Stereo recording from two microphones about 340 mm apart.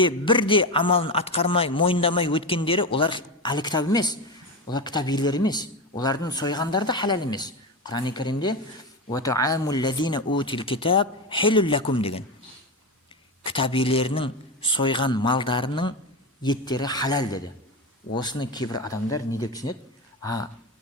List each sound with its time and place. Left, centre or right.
0.0 s speech: centre
13.4 s speech: centre